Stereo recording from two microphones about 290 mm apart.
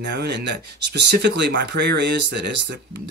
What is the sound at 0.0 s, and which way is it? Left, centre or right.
Speech, right.